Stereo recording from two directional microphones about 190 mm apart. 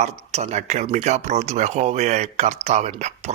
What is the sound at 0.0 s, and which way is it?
Speech, 35° right (ahead or behind).